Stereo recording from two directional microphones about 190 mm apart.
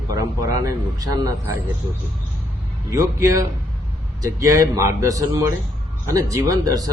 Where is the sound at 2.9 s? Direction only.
15° right (ahead or behind).